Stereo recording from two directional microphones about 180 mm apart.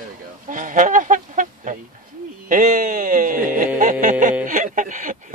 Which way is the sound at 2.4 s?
50° right (ahead or behind).